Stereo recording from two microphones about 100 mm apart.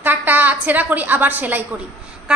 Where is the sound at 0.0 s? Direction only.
20° right (ahead or behind).